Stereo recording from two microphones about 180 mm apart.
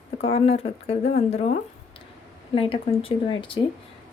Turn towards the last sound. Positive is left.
turn(degrees=30)  # may be behind; listen again after turning